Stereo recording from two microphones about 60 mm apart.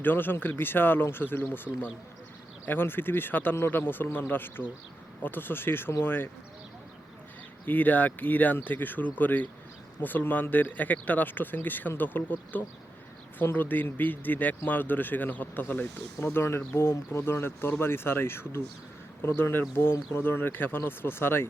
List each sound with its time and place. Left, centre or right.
0.0 s speech: left
7.6 s speech: left